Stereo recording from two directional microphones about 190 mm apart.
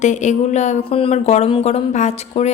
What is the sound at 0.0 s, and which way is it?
Speech, 40° left (ahead or behind).